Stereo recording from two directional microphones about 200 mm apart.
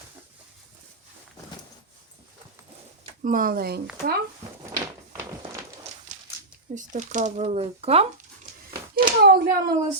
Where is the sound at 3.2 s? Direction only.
45° right (ahead or behind).